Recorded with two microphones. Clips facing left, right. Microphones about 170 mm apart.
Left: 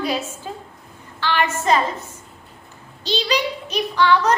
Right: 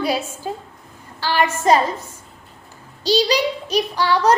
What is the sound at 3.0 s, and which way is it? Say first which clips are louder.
Child singing: right 4 dB; 35° right (ahead or behind).